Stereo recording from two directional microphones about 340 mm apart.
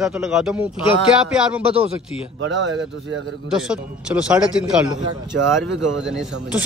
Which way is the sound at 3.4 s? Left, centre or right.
Centre.